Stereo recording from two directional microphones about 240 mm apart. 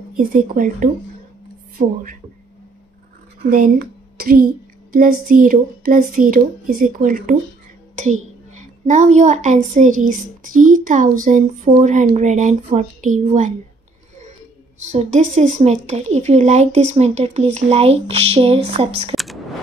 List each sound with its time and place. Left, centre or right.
0.3 s speech: right
3.4 s a woman's voice: right
14.9 s speech: right